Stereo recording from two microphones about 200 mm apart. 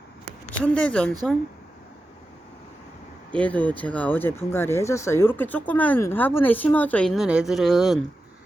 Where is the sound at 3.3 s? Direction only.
5° left (ahead or behind).